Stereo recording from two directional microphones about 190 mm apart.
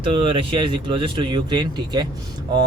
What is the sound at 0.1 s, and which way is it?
Speech, 30° right (ahead or behind).